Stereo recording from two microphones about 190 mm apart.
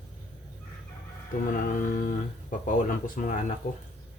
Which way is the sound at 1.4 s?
45° left (ahead or behind).